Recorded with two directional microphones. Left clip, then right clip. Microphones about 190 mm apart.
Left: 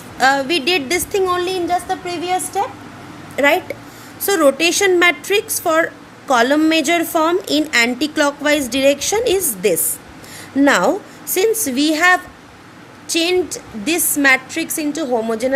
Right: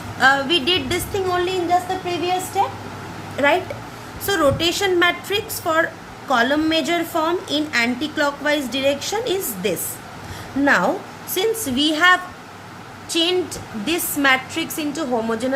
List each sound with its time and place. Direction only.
0.2 s a woman's voice: 35° left (ahead or behind)
2.0 s a woman's voice: 60° left (ahead or behind)
3.3 s a woman's voice: 50° left (ahead or behind)
11.3 s a woman's voice: 35° left (ahead or behind)